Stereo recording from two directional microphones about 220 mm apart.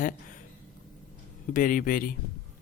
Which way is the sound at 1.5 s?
35° left (ahead or behind).